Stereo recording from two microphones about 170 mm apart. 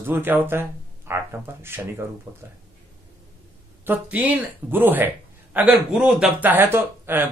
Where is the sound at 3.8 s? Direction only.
10° right (ahead or behind).